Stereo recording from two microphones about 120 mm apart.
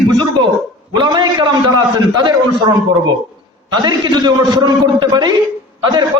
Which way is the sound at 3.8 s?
35° right (ahead or behind).